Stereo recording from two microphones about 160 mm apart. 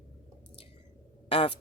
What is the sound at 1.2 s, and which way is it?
Speech, 35° left (ahead or behind).